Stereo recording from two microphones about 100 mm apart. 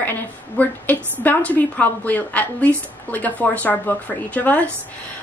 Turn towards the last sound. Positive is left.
turn(degrees=15)  # may be behind; listen again after turning